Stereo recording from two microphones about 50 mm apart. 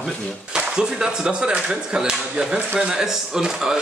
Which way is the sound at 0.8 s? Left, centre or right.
Centre.